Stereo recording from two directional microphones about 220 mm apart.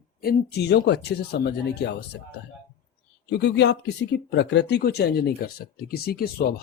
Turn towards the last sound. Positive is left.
turn(degrees=45)  # may be behind; listen again after turning